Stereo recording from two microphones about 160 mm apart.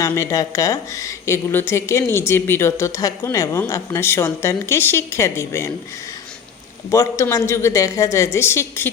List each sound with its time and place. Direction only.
0.0 s speech: 20° left (ahead or behind)
6.9 s a woman's voice: 20° left (ahead or behind)